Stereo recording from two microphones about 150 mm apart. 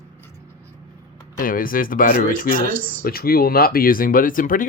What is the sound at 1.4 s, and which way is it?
Speech, 70° left (ahead or behind).